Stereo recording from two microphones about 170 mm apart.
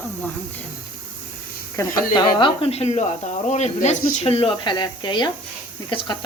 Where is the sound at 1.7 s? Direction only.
25° left (ahead or behind).